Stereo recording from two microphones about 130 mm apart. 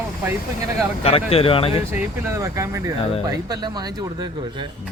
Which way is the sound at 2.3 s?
25° right (ahead or behind).